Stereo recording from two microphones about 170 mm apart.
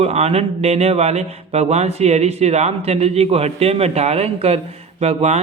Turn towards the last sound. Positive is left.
turn(degrees=-40)  # may be behind; listen again after turning